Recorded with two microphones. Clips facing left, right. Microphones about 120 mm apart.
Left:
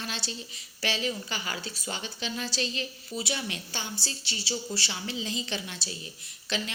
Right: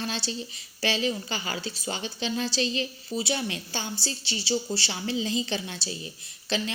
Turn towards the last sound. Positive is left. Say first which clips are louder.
# right 4 dB
turn(degrees=-30)  # may be behind; listen again after turning